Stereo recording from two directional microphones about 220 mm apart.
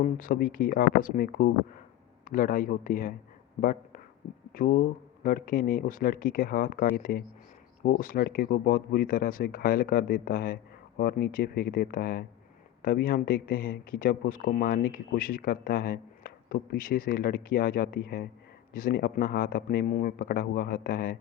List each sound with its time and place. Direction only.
0.0 s speech: 40° left (ahead or behind)